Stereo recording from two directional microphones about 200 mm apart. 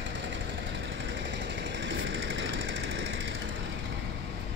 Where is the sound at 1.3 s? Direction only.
65° right (ahead or behind).